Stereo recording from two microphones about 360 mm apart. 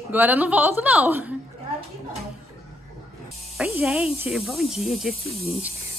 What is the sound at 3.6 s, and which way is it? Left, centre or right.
Speech, centre.